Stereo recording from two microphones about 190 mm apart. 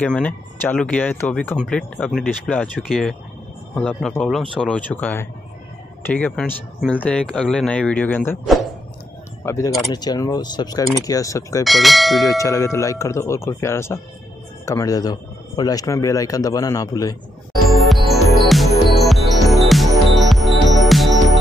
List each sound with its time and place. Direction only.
0.0 s speech: 5° left (ahead or behind)
9.4 s a man's voice: 15° left (ahead or behind)
11.6 s speech: centre (ahead or behind)
12.3 s a man's voice: 15° left (ahead or behind)
17.8 s music: centre (ahead or behind)